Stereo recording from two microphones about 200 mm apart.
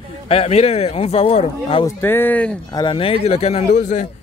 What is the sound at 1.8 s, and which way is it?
Speech, 10° left (ahead or behind).